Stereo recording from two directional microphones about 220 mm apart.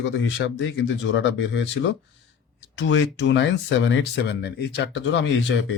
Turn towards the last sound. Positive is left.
turn(degrees=55)  # may be behind; listen again after turning